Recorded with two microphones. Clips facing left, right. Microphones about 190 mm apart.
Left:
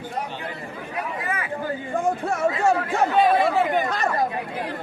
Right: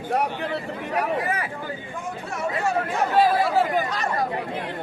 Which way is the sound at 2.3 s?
50° left (ahead or behind).